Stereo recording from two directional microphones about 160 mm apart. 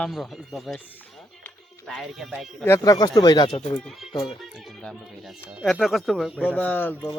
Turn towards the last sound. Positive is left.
turn(degrees=10)  # may be behind; listen again after turning